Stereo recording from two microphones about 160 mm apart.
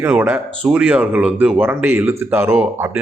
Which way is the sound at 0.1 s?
10° right (ahead or behind).